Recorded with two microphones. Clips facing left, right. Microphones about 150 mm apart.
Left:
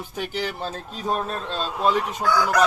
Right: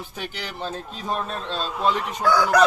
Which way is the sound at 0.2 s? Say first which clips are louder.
Left 5 dB; 10° left (ahead or behind).